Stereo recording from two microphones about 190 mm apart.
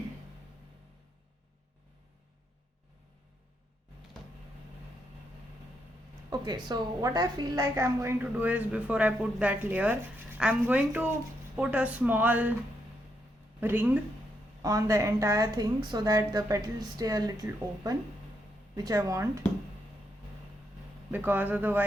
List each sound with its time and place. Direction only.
6.3 s a woman's voice: 20° right (ahead or behind)
13.6 s a woman's voice: 10° right (ahead or behind)
21.1 s a woman's voice: 10° right (ahead or behind)